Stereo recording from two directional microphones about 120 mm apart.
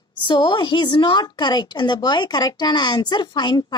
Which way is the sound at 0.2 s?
45° left (ahead or behind).